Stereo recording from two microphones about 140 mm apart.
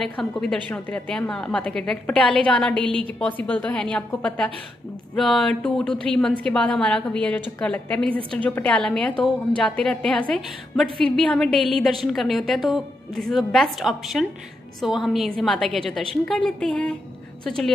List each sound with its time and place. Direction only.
0.0 s a woman's voice: 5° left (ahead or behind)
2.8 s a woman's voice: 35° right (ahead or behind)
3.2 s a woman's voice: 10° left (ahead or behind)